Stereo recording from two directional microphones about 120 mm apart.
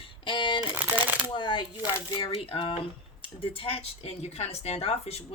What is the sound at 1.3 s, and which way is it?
Speech, 40° left (ahead or behind).